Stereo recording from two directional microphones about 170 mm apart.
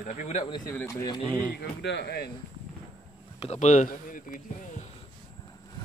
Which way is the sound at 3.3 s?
40° left (ahead or behind).